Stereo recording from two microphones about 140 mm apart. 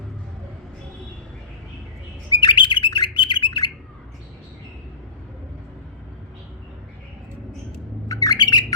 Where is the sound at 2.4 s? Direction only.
35° left (ahead or behind).